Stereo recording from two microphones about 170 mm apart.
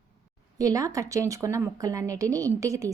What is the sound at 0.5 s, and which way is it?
Speech, 20° right (ahead or behind).